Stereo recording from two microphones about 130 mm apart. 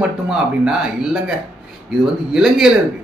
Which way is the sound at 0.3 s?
5° right (ahead or behind).